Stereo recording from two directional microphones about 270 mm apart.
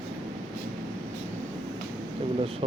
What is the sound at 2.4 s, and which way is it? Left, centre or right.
Speech, right.